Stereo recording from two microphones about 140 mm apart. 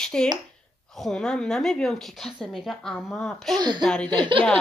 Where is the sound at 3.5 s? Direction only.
30° right (ahead or behind).